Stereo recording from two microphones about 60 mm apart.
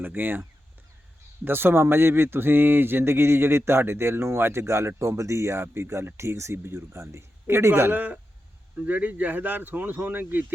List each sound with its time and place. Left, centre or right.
0.0 s speech: right
1.5 s speech: right